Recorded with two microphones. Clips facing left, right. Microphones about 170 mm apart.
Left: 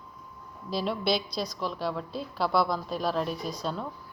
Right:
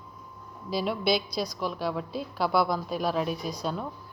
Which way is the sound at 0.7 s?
Centre (ahead or behind).